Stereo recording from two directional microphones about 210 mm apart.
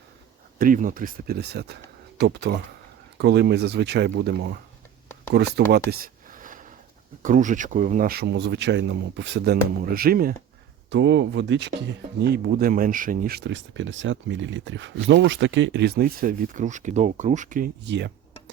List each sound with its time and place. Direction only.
0.6 s speech: 40° right (ahead or behind)
5.3 s a sound: 50° right (ahead or behind)
7.2 s speech: 40° right (ahead or behind)
10.8 s speech: 60° right (ahead or behind); by 17.7 s 40° right (ahead or behind)
17.8 s speech: 55° right (ahead or behind)